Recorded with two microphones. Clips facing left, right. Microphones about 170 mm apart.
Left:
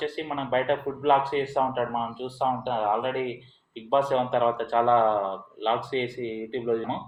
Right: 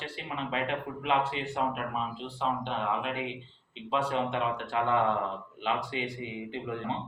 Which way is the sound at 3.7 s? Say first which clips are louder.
Left 7 dB; 35° left (ahead or behind).